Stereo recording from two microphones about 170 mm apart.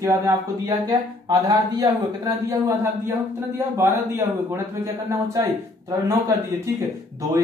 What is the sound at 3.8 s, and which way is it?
A man's voice, 15° right (ahead or behind).